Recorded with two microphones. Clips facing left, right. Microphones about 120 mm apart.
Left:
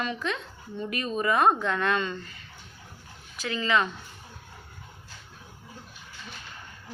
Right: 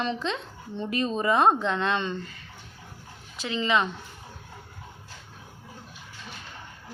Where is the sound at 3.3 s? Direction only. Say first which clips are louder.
Right 1 dB; 20° right (ahead or behind).